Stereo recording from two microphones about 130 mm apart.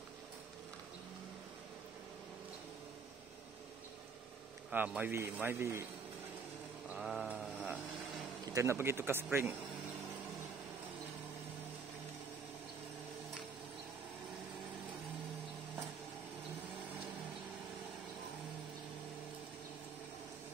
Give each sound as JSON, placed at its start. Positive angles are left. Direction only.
{"t": 4.6, "sound": "a man's voice", "side_deg": -10}
{"t": 6.9, "sound": "mantra", "side_deg": 0}
{"t": 8.5, "sound": "speech", "side_deg": -20}